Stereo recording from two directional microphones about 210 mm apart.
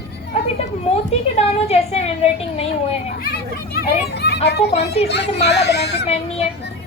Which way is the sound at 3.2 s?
45° left (ahead or behind).